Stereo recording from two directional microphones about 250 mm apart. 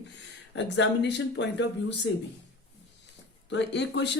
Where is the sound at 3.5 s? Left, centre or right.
Left.